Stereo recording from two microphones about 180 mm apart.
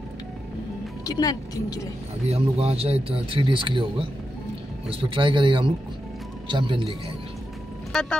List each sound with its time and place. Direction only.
1.0 s speech: 20° left (ahead or behind)
2.2 s speech: 35° right (ahead or behind)
4.8 s speech: 30° right (ahead or behind)
7.9 s speech: 5° left (ahead or behind)